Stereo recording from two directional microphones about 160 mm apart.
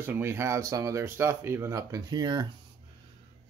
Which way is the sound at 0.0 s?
15° right (ahead or behind).